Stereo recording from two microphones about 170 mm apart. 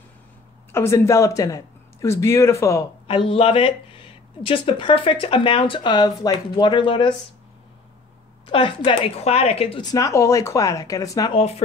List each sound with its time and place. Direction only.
0.7 s speech: 15° left (ahead or behind)
3.1 s speech: 30° left (ahead or behind)
8.5 s speech: 30° left (ahead or behind)
9.8 s speech: 20° left (ahead or behind)
11.3 s speech: 35° left (ahead or behind)